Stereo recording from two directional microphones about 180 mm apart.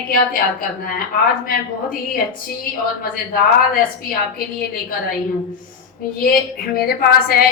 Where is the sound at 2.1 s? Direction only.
55° left (ahead or behind).